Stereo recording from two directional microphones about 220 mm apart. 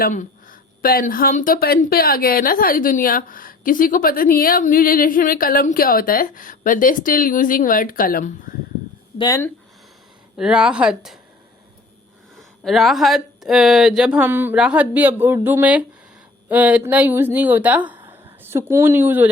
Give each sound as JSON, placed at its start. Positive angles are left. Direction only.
{"t": 0.0, "sound": "speech", "side_deg": 40}
{"t": 9.1, "sound": "speech", "side_deg": 15}
{"t": 10.3, "sound": "speech", "side_deg": -5}
{"t": 12.4, "sound": "speech", "side_deg": 0}